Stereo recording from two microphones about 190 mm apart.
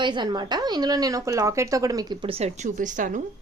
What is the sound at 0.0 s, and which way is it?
A woman's voice, 25° right (ahead or behind).